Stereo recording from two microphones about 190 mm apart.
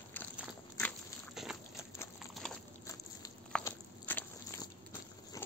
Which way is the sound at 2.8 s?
20° left (ahead or behind).